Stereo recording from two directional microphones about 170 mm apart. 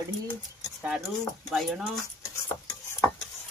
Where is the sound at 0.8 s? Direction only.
5° right (ahead or behind).